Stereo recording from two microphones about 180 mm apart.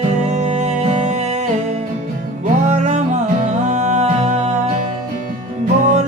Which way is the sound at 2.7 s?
40° right (ahead or behind).